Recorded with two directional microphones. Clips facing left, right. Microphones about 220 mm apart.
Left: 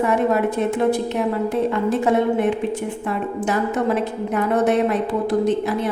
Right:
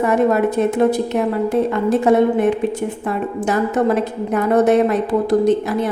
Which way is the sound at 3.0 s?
40° right (ahead or behind).